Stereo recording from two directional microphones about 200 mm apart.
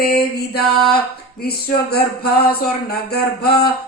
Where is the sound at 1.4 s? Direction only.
50° left (ahead or behind).